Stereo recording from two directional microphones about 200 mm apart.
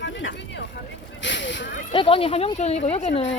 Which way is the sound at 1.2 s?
65° left (ahead or behind).